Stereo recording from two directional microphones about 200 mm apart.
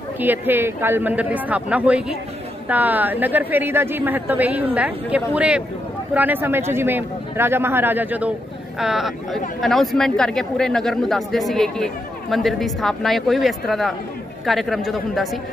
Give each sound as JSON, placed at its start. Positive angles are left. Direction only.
{"t": 0.2, "sound": "a woman's voice", "side_deg": -10}